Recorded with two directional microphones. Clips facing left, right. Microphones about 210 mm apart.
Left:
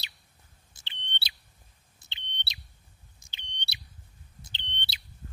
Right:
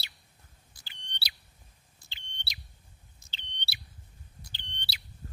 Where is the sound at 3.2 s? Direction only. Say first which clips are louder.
Left 1 dB; 15° left (ahead or behind).